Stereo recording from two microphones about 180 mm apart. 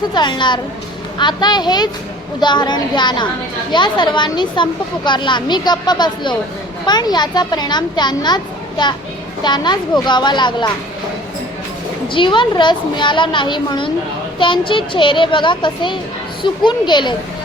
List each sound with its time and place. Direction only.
0.1 s speech: 25° left (ahead or behind)
9.4 s speech: 25° left (ahead or behind)
12.0 s speech: 25° left (ahead or behind)